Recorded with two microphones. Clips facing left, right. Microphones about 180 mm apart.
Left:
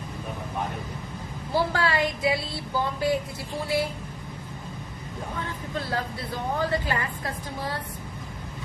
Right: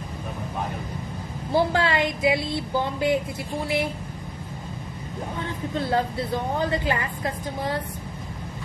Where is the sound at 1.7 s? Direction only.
20° right (ahead or behind).